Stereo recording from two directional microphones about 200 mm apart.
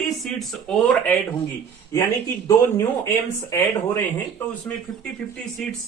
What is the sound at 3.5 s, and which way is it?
Speech, 15° left (ahead or behind).